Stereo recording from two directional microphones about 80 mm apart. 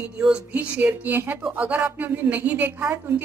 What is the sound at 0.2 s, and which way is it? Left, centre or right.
Speech, centre.